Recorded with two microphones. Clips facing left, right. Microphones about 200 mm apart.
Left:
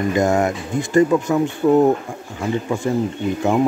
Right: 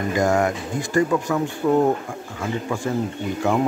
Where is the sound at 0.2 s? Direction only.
25° left (ahead or behind).